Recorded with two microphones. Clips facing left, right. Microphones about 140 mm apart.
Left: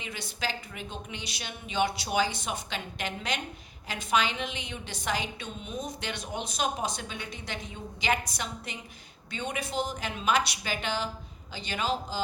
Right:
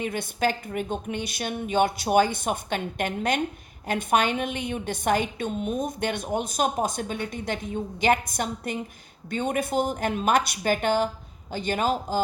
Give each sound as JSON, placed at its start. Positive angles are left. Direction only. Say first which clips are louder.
{"t": 0.0, "sound": "a woman's voice", "louder": "right 10 dB", "side_deg": -50}